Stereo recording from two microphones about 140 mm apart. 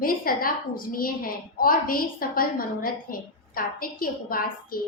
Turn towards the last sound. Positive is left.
turn(degrees=90)